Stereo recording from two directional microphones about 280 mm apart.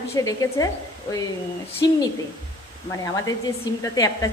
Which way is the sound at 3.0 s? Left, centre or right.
Centre.